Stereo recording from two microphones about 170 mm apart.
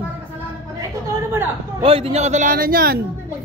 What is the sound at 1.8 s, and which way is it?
A man's voice, 35° right (ahead or behind).